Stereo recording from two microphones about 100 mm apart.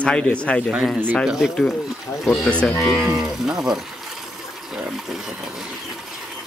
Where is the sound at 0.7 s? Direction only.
5° right (ahead or behind).